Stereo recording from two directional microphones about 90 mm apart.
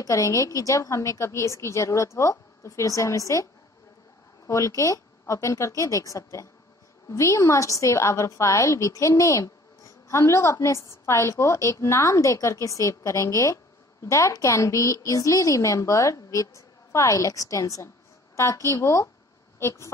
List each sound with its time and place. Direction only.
0.0 s a woman's voice: 40° left (ahead or behind)
4.5 s a woman's voice: 35° left (ahead or behind)